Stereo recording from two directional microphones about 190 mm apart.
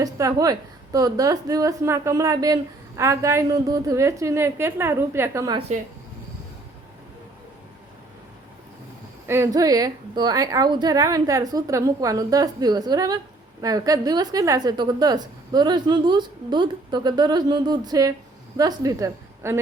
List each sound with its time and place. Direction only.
0.0 s a woman's voice: 20° right (ahead or behind)
9.2 s a woman's voice: 15° right (ahead or behind)